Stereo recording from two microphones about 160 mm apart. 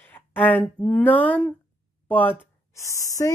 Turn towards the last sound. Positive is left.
turn(degrees=20)  # may be behind; listen again after turning